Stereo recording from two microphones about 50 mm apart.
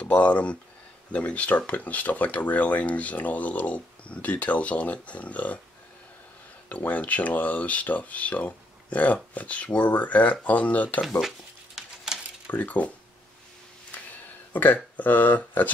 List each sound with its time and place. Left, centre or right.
0.0 s speech: left
6.7 s speech: left
11.1 s a sound: centre
12.4 s speech: left
14.5 s speech: left